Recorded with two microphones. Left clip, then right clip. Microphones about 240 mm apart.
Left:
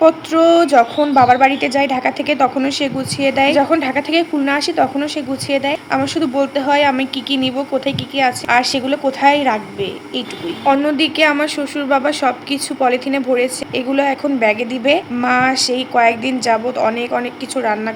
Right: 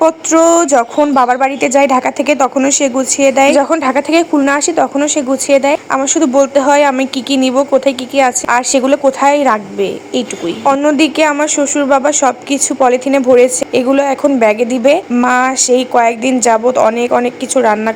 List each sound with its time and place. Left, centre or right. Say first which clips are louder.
0.0 s a woman's voice: right 2 dB; right